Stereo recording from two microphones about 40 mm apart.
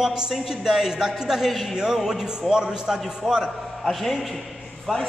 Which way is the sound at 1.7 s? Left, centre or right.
Centre.